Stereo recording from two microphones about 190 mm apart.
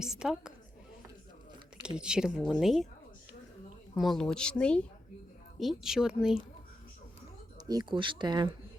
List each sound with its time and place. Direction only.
0.0 s speech: 5° right (ahead or behind)
2.0 s speech: 5° right (ahead or behind)
3.9 s speech: centre (ahead or behind)
7.7 s speech: 25° right (ahead or behind)